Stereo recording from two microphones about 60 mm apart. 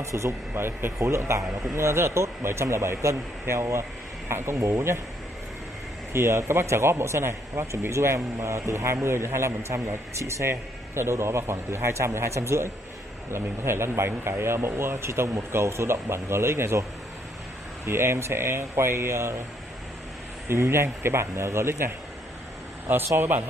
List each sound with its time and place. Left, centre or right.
0.0 s speech: right
6.1 s speech: right
17.8 s speech: right
20.4 s speech: right
23.1 s speech: right